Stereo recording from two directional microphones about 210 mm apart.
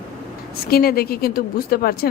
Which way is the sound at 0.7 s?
45° left (ahead or behind).